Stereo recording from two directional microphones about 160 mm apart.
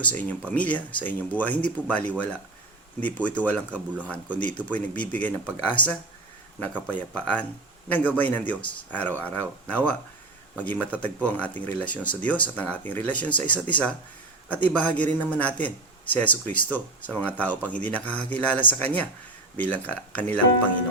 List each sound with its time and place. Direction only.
0.0 s speech: 10° left (ahead or behind)